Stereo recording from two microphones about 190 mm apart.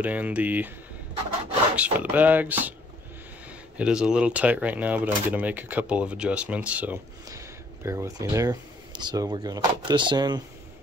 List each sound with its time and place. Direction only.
0.0 s speech: 10° right (ahead or behind)
1.8 s speech: 10° right (ahead or behind)
3.7 s speech: 5° right (ahead or behind); by 10.4 s 20° right (ahead or behind)